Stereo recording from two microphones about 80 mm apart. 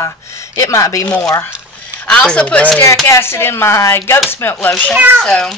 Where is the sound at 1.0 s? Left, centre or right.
Centre.